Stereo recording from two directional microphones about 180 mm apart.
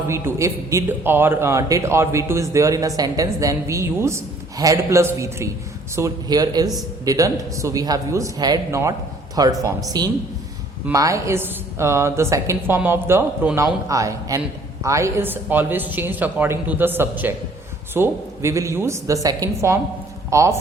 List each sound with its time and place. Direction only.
0.1 s a man's voice: 15° right (ahead or behind)
13.8 s a man's voice: 20° right (ahead or behind)